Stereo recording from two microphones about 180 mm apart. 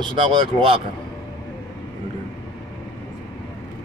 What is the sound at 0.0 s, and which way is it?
Speech, 25° right (ahead or behind).